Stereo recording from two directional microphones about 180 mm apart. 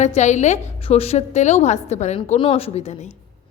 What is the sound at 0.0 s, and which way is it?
A woman's voice, 40° left (ahead or behind).